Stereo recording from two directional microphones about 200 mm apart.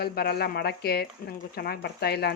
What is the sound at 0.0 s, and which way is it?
Speech, 50° left (ahead or behind).